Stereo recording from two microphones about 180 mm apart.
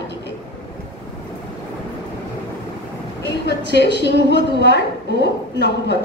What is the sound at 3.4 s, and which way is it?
A woman's voice, 70° left (ahead or behind).